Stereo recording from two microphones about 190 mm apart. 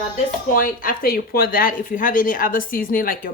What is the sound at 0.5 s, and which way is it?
Speech, 50° left (ahead or behind).